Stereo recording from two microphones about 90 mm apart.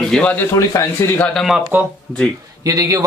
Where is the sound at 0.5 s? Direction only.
30° left (ahead or behind).